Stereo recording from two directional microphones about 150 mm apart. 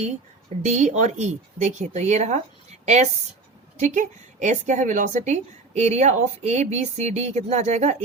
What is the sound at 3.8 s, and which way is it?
Speech, 55° right (ahead or behind).